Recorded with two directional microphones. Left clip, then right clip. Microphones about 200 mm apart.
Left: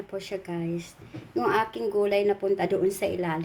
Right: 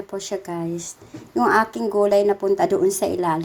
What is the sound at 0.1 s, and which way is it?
A woman's voice, 15° right (ahead or behind).